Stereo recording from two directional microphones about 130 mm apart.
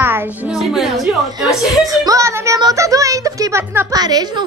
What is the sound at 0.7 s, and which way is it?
Speech, centre (ahead or behind).